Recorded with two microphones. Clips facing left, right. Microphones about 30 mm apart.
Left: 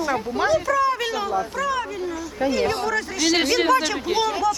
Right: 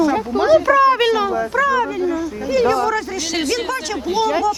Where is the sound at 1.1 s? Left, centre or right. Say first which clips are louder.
Right 6 dB; right.